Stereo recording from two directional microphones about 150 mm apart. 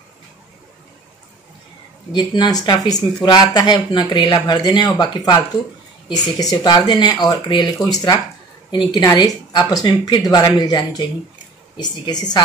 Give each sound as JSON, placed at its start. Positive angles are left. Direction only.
{"t": 2.1, "sound": "speech", "side_deg": 30}